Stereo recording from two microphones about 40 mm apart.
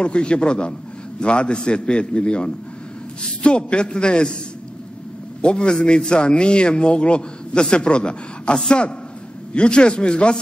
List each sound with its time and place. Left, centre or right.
0.0 s a man's voice: left
5.4 s a man's voice: left